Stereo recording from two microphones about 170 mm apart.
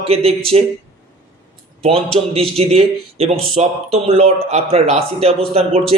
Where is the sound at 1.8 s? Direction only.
35° right (ahead or behind).